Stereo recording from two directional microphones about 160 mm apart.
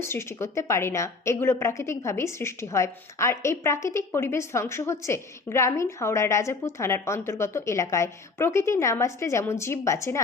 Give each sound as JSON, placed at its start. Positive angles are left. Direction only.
{"t": 0.0, "sound": "a woman's voice", "side_deg": 15}